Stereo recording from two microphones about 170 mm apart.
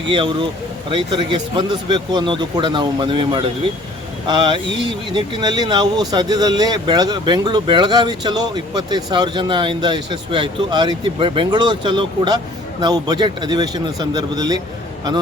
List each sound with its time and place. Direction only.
0.1 s speech: 30° right (ahead or behind)